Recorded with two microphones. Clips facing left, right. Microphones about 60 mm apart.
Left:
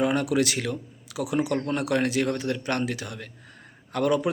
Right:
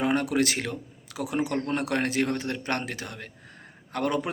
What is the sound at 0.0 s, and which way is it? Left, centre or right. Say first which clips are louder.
Speech: left 1 dB; right.